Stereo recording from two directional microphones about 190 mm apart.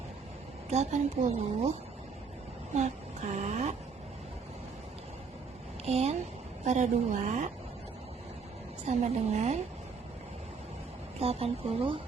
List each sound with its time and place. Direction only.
0.7 s speech: 35° right (ahead or behind)
2.7 s speech: 35° right (ahead or behind)
5.8 s speech: 35° right (ahead or behind)
8.9 s speech: 35° right (ahead or behind)
11.2 s speech: 30° right (ahead or behind)